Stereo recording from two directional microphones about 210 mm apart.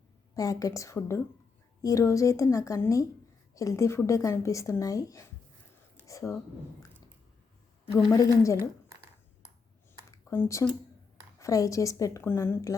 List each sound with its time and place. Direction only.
0.3 s speech: 15° left (ahead or behind)
8.1 s speech: 15° left (ahead or behind)
10.1 s a sound: 10° left (ahead or behind)
11.3 s speech: 15° left (ahead or behind)